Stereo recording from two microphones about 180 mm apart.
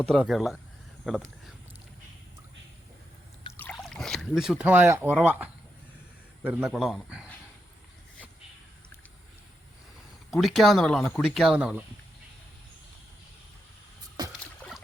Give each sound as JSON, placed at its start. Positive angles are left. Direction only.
{"t": 0.0, "sound": "speech", "side_deg": 5}
{"t": 3.6, "sound": "rowboat", "side_deg": 5}
{"t": 5.1, "sound": "speech", "side_deg": -10}
{"t": 10.3, "sound": "speech", "side_deg": 0}
{"t": 14.2, "sound": "rowboat", "side_deg": -20}
{"t": 14.6, "sound": "a sound", "side_deg": 10}